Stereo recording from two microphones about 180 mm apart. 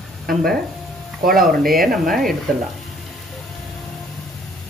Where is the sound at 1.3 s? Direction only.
Centre (ahead or behind).